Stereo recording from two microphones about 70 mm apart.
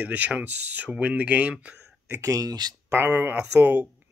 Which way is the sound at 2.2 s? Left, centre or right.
Right.